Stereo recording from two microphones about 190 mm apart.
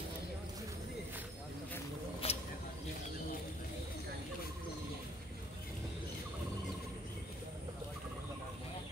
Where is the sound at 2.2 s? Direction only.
30° left (ahead or behind).